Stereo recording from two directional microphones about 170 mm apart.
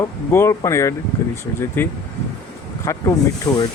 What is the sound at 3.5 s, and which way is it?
Speech, 20° left (ahead or behind).